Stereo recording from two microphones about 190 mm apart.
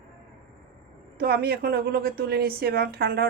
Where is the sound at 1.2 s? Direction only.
55° right (ahead or behind).